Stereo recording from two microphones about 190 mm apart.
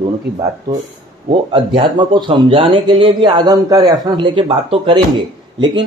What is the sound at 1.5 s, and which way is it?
A man's voice, 25° right (ahead or behind).